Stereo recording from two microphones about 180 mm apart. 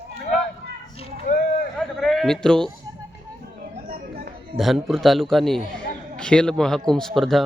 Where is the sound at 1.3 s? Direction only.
50° left (ahead or behind).